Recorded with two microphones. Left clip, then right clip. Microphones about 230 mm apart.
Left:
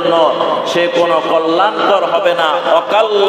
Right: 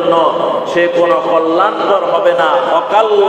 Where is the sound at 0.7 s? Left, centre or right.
Left.